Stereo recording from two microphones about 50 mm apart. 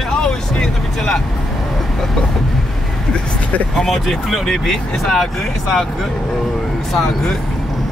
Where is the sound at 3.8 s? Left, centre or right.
Centre.